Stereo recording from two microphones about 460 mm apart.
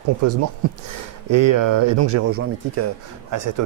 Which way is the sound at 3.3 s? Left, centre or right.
Right.